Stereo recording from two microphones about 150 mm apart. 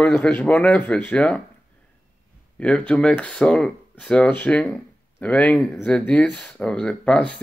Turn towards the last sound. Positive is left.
turn(degrees=10)  # may be behind; listen again after turning